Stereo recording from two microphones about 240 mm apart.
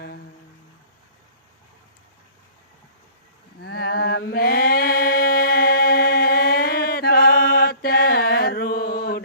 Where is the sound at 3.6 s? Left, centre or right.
Left.